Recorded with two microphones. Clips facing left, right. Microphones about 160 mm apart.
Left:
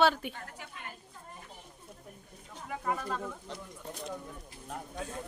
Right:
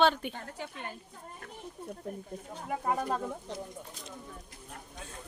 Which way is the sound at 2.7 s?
40° right (ahead or behind).